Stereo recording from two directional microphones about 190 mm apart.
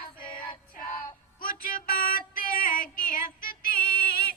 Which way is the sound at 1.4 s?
45° left (ahead or behind).